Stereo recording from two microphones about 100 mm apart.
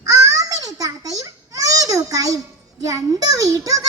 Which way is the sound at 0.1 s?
35° right (ahead or behind).